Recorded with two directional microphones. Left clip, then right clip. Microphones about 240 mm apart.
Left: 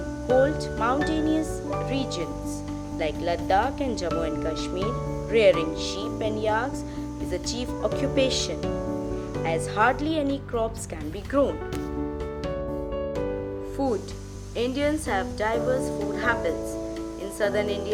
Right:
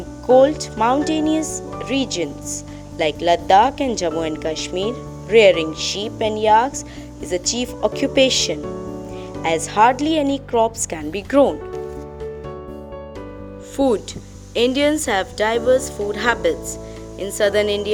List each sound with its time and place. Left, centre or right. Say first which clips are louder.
0.3 s speech: right 8 dB; right
13.7 s speech: right 10 dB; right